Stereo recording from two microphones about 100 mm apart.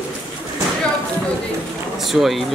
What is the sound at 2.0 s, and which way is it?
Speech, centre (ahead or behind).